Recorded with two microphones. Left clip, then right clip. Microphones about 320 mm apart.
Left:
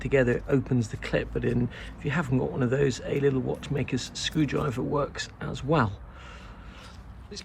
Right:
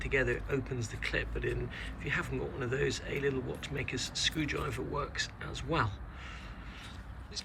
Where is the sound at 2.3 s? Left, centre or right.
Left.